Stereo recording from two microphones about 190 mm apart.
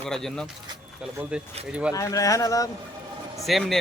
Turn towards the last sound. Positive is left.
turn(degrees=0)  # may be behind; listen again after turning